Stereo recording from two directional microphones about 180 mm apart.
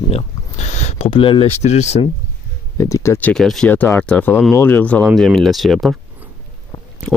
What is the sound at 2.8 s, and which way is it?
Speech, 15° left (ahead or behind).